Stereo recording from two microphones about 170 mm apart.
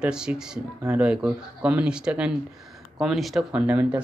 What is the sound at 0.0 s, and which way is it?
Speech, 5° right (ahead or behind).